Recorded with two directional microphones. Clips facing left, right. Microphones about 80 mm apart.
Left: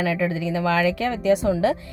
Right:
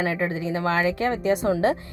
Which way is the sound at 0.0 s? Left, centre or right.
Right.